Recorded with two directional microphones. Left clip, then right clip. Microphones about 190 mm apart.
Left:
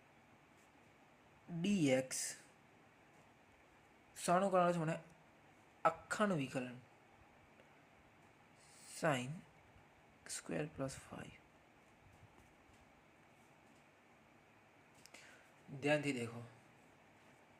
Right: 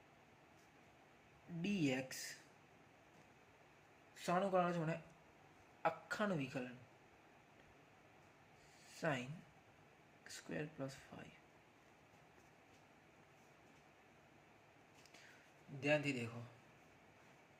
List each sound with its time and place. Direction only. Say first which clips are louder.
1.6 s speech: left 5 dB; 30° left (ahead or behind)
4.1 s speech: left 4 dB; 30° left (ahead or behind)
8.9 s a sound: left 4 dB; 35° left (ahead or behind)
10.2 s speech: left 4 dB; 30° left (ahead or behind)
15.8 s a man's voice: left 1 dB; 20° left (ahead or behind)